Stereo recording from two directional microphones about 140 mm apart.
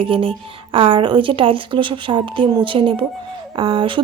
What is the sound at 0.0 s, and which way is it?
Speech, 40° right (ahead or behind).